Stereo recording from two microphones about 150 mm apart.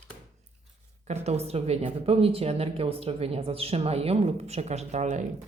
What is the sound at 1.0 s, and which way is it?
Speech, 45° right (ahead or behind).